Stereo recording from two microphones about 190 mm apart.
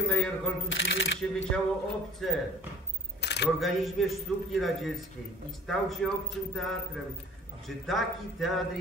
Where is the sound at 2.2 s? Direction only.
Centre (ahead or behind).